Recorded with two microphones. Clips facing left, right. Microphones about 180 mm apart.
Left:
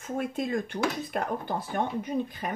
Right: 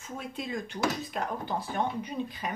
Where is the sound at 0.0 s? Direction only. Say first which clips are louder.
Left 7 dB; 50° left (ahead or behind).